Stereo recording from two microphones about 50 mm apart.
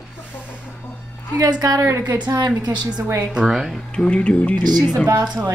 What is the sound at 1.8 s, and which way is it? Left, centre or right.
Speech, right.